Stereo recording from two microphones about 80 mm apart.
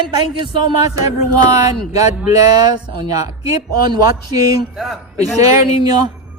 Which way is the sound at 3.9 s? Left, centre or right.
Right.